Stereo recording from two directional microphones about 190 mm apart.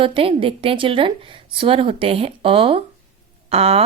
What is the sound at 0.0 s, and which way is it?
A woman's voice, 30° right (ahead or behind).